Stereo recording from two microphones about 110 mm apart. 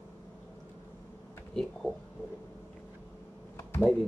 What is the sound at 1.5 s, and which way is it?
Speech, 5° left (ahead or behind).